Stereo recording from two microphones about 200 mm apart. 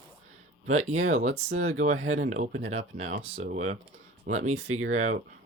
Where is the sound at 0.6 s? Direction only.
35° right (ahead or behind).